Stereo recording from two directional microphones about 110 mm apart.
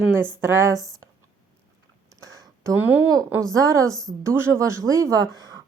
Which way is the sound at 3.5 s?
30° right (ahead or behind).